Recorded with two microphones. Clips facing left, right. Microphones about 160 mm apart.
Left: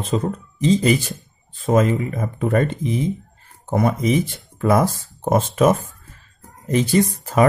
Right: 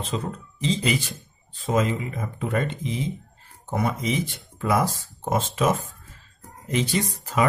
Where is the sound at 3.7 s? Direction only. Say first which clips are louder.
Left 7 dB; 50° left (ahead or behind).